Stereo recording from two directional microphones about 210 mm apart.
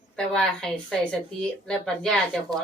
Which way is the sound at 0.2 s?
5° left (ahead or behind).